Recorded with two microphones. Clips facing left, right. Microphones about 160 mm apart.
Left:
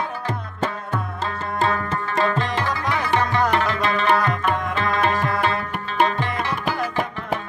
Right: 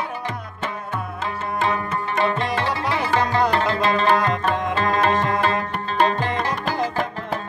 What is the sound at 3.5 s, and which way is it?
Music, 35° right (ahead or behind).